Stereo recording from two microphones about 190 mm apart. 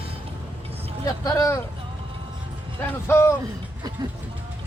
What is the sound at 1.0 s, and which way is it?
Speech, 20° left (ahead or behind).